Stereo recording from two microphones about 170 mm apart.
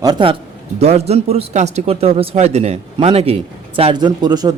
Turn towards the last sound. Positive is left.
turn(degrees=-25)  # may be behind; listen again after turning